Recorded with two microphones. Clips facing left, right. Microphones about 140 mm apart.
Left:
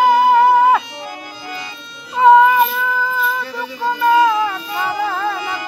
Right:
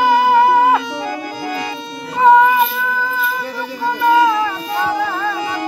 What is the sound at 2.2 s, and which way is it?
Mosquito, centre (ahead or behind).